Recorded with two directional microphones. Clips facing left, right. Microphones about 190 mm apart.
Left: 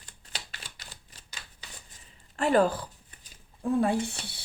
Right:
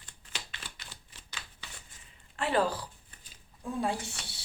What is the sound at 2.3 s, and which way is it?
Speech, 45° left (ahead or behind).